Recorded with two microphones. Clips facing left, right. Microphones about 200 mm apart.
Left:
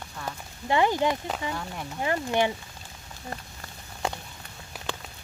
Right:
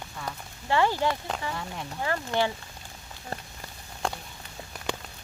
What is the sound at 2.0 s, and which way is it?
Speech, 15° left (ahead or behind).